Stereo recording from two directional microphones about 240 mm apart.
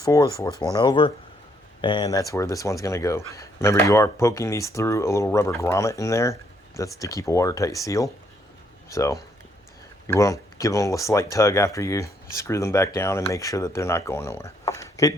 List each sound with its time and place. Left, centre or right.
0.0 s speech: centre